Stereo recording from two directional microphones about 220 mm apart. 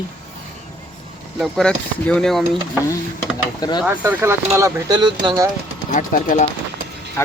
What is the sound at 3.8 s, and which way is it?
Speech, 10° right (ahead or behind).